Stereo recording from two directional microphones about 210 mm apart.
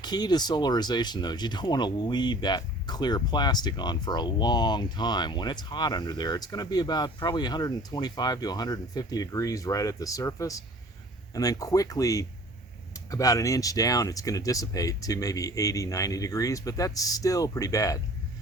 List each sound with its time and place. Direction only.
0.0 s speech: 20° left (ahead or behind)